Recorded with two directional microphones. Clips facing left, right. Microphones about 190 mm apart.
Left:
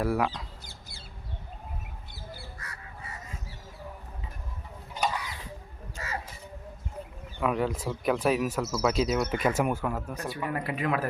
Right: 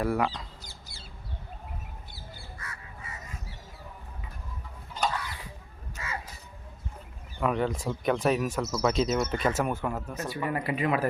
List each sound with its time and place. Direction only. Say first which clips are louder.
0.0 s speech: even; 5° left (ahead or behind)
0.6 s a sound: even; 55° left (ahead or behind)
2.6 s crow: even; 40° left (ahead or behind)
4.9 s chicken: even; 15° left (ahead or behind)
6.0 s a sound: even; 40° left (ahead or behind)
7.3 s speech: even; 5° left (ahead or behind)
10.2 s speech: right 1 dB; centre (ahead or behind)